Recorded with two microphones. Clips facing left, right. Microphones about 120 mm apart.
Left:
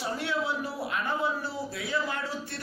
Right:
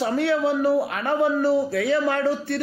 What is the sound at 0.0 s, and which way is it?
Speech, 65° right (ahead or behind).